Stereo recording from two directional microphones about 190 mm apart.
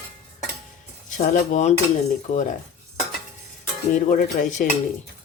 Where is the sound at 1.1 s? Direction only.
45° left (ahead or behind).